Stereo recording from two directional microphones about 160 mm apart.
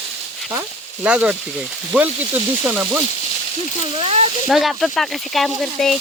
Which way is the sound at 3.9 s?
40° right (ahead or behind).